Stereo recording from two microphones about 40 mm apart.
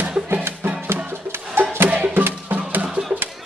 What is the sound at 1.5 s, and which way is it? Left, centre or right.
Music, right.